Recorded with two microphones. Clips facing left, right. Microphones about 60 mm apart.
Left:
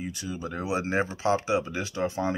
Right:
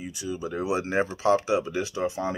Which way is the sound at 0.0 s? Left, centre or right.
Left.